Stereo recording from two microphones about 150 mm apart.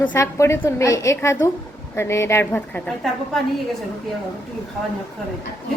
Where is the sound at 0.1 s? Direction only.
20° left (ahead or behind); by 3.4 s 5° left (ahead or behind).